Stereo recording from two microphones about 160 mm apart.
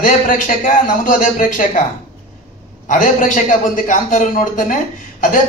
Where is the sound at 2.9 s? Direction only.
55° left (ahead or behind).